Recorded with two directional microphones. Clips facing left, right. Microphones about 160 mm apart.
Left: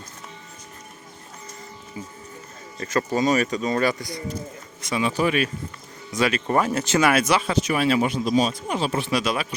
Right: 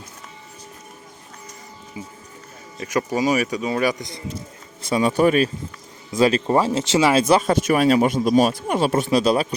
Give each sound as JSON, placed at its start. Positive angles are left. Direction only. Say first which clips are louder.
{"t": 2.0, "sound": "speech", "louder": "even", "side_deg": -10}
{"t": 4.8, "sound": "speech", "louder": "right 5 dB", "side_deg": -35}
{"t": 7.3, "sound": "speech", "louder": "right 5 dB", "side_deg": -50}
{"t": 9.0, "sound": "speech", "louder": "right 6 dB", "side_deg": -35}